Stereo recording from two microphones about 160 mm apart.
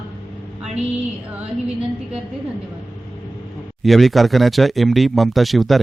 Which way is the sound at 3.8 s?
Centre (ahead or behind).